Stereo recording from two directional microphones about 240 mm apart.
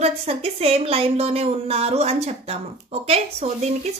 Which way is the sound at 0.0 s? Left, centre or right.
Right.